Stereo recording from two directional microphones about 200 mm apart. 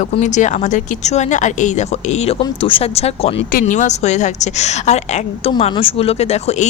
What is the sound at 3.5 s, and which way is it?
Speech, 40° left (ahead or behind).